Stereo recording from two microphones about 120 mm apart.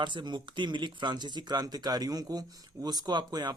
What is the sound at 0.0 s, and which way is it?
Speech, 40° right (ahead or behind).